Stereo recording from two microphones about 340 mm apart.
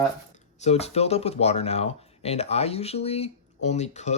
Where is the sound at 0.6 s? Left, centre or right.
Centre.